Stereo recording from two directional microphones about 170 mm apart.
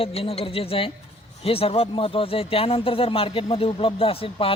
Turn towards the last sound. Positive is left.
turn(degrees=35)  # may be behind; listen again after turning